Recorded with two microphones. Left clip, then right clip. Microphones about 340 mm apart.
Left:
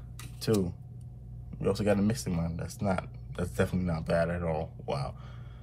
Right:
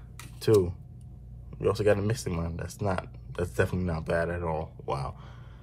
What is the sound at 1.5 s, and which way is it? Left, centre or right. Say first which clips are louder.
Speech: right 4 dB; right.